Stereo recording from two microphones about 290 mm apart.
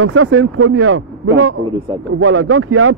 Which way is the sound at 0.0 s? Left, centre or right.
Right.